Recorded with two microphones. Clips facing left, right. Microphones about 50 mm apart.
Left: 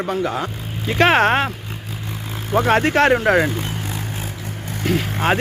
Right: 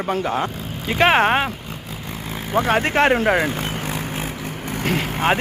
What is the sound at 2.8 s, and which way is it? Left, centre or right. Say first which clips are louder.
Speech: left 2 dB; right.